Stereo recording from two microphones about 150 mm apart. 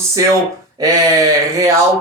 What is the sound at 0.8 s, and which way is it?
Speech, 25° right (ahead or behind).